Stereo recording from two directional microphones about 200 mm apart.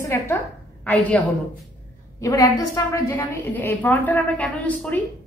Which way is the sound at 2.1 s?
15° left (ahead or behind).